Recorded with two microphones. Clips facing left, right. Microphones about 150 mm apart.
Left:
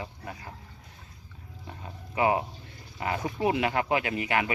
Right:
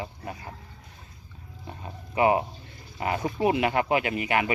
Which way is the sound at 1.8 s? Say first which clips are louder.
Right 3 dB; 20° right (ahead or behind).